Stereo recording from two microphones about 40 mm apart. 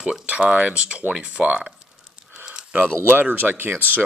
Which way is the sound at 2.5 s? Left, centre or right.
Right.